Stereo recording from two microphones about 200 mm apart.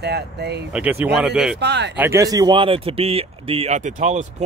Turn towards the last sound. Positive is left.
turn(degrees=-35)  # may be behind; listen again after turning